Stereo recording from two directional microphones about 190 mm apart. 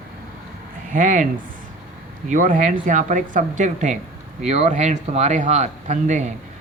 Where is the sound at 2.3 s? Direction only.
45° right (ahead or behind).